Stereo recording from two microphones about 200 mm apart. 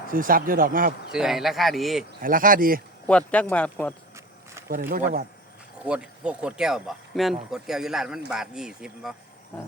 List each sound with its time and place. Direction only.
0.1 s speech: 45° right (ahead or behind)
1.1 s speech: centre (ahead or behind)
2.2 s speech: 45° right (ahead or behind)
3.1 s speech: 5° left (ahead or behind)
4.7 s speech: 50° right (ahead or behind)
5.8 s speech: 5° right (ahead or behind)